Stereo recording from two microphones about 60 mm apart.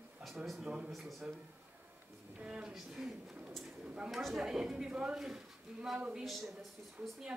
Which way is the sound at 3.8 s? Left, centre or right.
Centre.